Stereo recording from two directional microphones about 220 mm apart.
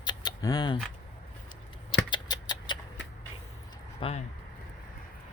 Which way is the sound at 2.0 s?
20° left (ahead or behind).